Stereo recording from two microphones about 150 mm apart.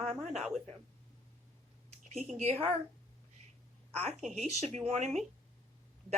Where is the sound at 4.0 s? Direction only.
45° right (ahead or behind).